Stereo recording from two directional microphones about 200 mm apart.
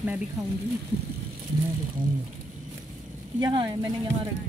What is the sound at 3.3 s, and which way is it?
Speech, 20° right (ahead or behind).